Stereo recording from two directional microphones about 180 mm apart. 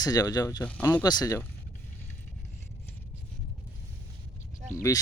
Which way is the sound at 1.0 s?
20° left (ahead or behind).